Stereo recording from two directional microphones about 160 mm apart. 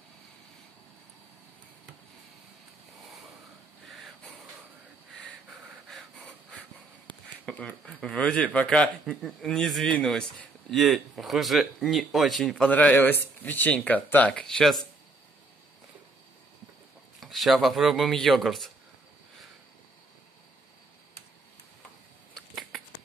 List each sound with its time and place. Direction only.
3.8 s a sound: centre (ahead or behind)
5.9 s wheeze: centre (ahead or behind)
7.4 s speech: 5° left (ahead or behind)
17.2 s speech: centre (ahead or behind)
22.3 s finger snapping: 5° left (ahead or behind)